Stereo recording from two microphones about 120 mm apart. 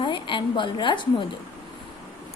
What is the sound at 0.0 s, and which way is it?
A woman's voice, 45° left (ahead or behind).